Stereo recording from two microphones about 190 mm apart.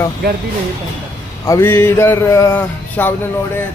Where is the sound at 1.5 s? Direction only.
15° left (ahead or behind).